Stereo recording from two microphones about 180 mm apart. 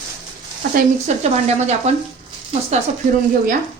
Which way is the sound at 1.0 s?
40° right (ahead or behind).